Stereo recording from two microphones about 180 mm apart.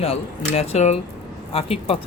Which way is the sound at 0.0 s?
35° left (ahead or behind).